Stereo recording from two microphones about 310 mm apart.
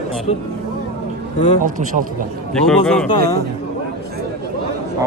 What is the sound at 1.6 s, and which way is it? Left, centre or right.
Speech, right.